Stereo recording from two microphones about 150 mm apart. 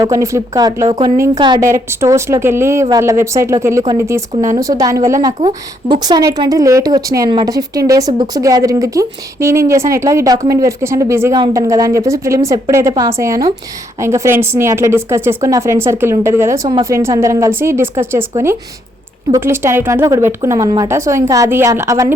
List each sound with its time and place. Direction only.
0.0 s a woman's voice: 20° right (ahead or behind)
1.7 s a woman's voice: 20° right (ahead or behind)